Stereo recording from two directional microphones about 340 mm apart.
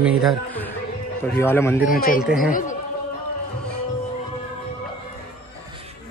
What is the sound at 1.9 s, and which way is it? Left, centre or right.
Speech, left.